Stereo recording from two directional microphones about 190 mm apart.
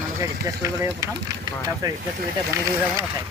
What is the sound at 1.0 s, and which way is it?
Speech, 15° right (ahead or behind).